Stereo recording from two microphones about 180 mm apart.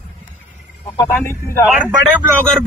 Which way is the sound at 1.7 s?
10° right (ahead or behind).